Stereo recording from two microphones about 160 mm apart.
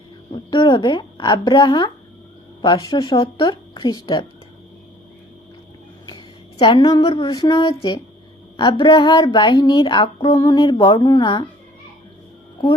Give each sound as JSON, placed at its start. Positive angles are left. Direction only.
{"t": 0.5, "sound": "speech", "side_deg": 30}
{"t": 6.1, "sound": "speech", "side_deg": 30}